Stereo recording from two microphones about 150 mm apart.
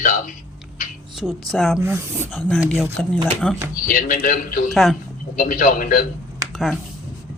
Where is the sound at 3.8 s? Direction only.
65° left (ahead or behind).